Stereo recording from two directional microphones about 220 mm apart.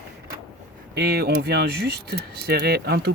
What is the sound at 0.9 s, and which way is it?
Speech, 45° right (ahead or behind).